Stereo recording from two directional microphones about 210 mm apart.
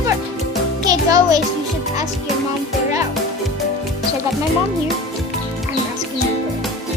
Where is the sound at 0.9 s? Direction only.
15° right (ahead or behind).